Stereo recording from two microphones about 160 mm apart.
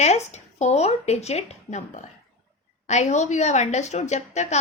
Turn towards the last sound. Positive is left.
turn(degrees=45)  # may be behind; listen again after turning